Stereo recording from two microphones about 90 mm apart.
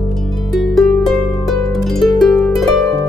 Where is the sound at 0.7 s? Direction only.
5° left (ahead or behind).